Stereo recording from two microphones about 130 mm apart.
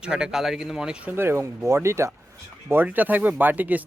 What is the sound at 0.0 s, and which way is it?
Speech, 5° right (ahead or behind).